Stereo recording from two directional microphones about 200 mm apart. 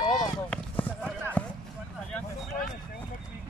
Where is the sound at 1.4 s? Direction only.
5° left (ahead or behind).